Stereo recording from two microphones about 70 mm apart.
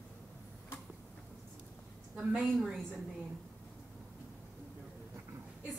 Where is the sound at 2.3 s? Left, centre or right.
Centre.